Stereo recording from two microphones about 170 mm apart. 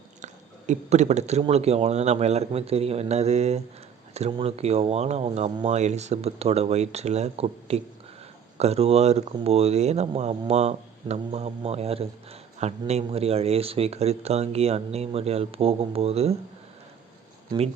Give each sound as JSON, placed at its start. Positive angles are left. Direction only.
{"t": 0.7, "sound": "speech", "side_deg": -45}